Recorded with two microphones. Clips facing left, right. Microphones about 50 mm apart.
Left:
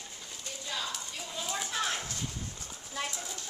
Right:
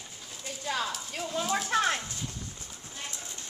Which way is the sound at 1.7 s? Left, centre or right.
Right.